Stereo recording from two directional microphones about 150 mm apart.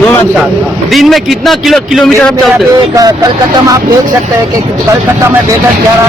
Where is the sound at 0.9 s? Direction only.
Centre (ahead or behind).